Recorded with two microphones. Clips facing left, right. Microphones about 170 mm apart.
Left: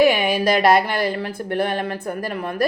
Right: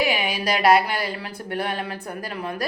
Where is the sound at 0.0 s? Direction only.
50° left (ahead or behind).